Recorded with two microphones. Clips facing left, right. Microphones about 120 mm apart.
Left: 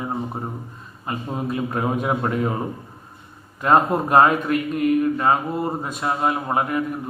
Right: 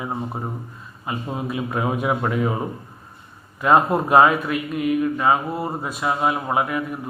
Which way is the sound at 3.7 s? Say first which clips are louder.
Right 1 dB; 10° right (ahead or behind).